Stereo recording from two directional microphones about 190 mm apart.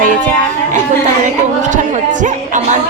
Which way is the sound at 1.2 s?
40° right (ahead or behind).